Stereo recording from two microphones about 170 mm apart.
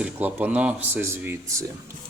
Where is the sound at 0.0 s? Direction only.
10° right (ahead or behind).